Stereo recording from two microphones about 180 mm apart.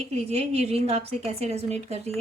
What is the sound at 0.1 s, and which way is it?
A woman's voice, 35° right (ahead or behind).